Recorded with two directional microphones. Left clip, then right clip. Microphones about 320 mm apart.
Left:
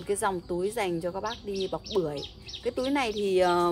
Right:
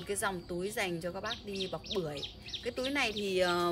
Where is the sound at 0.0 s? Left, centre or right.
Centre.